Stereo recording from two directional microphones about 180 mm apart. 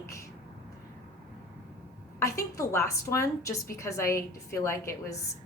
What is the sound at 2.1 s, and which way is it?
A woman's voice, 15° left (ahead or behind).